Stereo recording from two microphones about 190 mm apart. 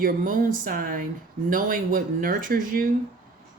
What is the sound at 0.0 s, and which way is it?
Speech, 45° right (ahead or behind).